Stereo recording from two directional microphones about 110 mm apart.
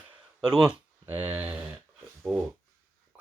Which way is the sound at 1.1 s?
15° right (ahead or behind).